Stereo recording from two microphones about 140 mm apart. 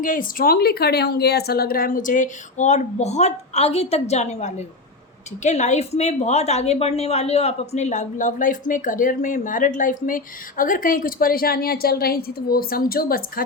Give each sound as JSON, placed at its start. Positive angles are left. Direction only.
{"t": 0.0, "sound": "a woman's voice", "side_deg": 75}